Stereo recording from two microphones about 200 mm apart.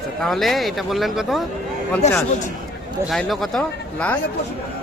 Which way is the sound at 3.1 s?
Centre (ahead or behind).